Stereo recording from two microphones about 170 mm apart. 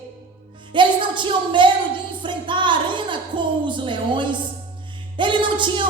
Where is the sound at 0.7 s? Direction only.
30° right (ahead or behind).